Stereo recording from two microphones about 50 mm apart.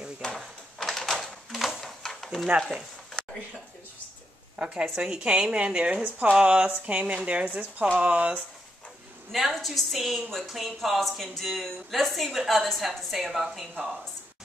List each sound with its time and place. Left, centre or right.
0.8 s door: centre
1.5 s a sound: centre
4.6 s a woman's voice: centre
6.0 s speech: right
6.4 s a woman's voice: right
9.3 s speech: centre